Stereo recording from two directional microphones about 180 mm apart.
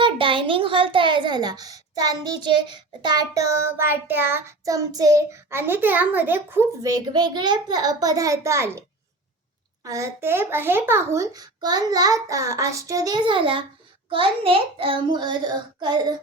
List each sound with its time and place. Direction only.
0.0 s a child's voice: 30° right (ahead or behind)
9.8 s a child's voice: 15° right (ahead or behind)